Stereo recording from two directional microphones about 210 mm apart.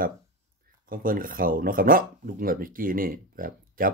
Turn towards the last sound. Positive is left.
turn(degrees=-40)  # may be behind; listen again after turning